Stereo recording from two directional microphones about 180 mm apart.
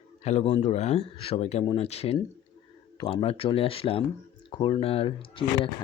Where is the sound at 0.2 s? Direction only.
35° left (ahead or behind).